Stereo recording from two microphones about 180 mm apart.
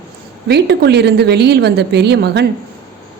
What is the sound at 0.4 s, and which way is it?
A woman's voice, 70° right (ahead or behind).